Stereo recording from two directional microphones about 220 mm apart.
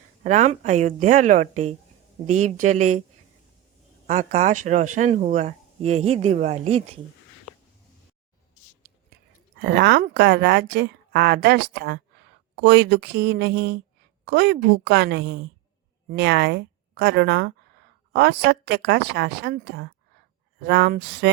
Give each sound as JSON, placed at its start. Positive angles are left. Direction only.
{"t": 0.2, "sound": "speech", "side_deg": -35}
{"t": 4.0, "sound": "speech", "side_deg": -30}
{"t": 9.6, "sound": "speech", "side_deg": -50}